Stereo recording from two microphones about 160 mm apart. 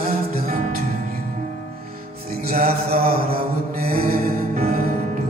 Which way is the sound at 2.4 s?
65° right (ahead or behind).